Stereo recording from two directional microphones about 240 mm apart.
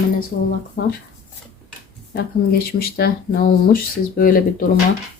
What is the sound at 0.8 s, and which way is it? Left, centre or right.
Speech, left.